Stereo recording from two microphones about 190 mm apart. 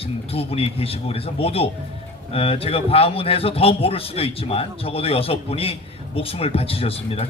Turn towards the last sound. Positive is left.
turn(degrees=30)  # may be behind; listen again after turning